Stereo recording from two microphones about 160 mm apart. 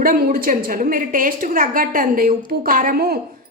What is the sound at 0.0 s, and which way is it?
A woman's voice, 60° right (ahead or behind).